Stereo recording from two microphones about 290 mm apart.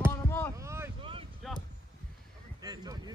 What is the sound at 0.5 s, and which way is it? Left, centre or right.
Boat, centre.